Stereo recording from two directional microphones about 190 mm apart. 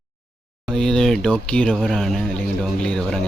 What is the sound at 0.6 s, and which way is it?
Speech, 5° left (ahead or behind).